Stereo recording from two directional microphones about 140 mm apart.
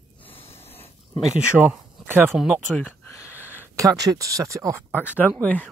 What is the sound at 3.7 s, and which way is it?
Speech, 25° right (ahead or behind).